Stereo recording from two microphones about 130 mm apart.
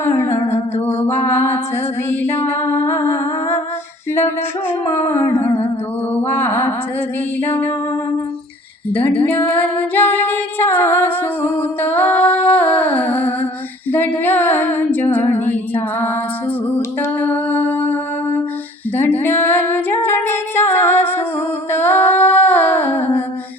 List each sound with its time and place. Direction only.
0.0 s humming: 20° left (ahead or behind)
0.5 s music: 20° left (ahead or behind)
4.9 s a sound: 20° left (ahead or behind)
8.9 s female singing: 15° left (ahead or behind)
9.9 s music: 15° left (ahead or behind)
13.9 s female singing: 15° left (ahead or behind)
16.7 s music: 15° left (ahead or behind)
18.9 s female singing: 15° left (ahead or behind)
21.7 s a sound: 15° left (ahead or behind)